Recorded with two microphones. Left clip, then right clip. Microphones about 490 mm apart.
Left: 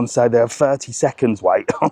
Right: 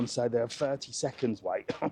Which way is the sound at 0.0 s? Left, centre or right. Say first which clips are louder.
Left 15 dB; left.